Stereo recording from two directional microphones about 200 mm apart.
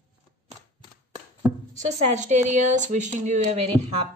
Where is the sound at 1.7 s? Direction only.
35° right (ahead or behind).